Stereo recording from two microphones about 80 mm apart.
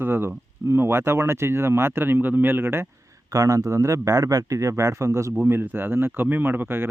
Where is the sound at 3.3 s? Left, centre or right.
Right.